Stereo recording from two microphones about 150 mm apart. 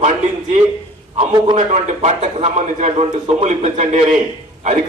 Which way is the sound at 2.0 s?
50° right (ahead or behind).